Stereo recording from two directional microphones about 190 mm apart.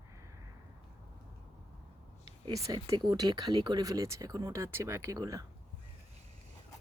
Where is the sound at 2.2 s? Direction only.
20° right (ahead or behind).